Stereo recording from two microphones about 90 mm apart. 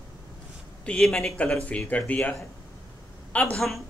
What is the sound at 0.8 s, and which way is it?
Speech, 5° left (ahead or behind).